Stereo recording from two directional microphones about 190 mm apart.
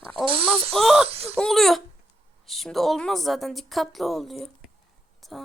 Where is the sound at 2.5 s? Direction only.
Centre (ahead or behind).